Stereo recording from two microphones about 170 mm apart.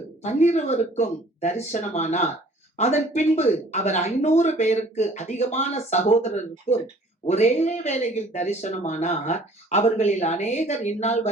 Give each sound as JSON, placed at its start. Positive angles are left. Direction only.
{"t": 0.2, "sound": "speech", "side_deg": 40}